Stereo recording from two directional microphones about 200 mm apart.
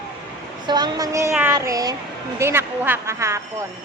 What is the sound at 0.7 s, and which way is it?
A woman's voice, 20° right (ahead or behind).